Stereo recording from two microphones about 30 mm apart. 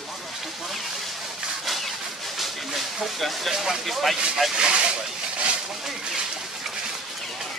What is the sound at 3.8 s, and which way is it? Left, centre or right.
Speech, centre.